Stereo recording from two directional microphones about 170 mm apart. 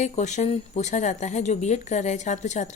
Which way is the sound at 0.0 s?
40° left (ahead or behind).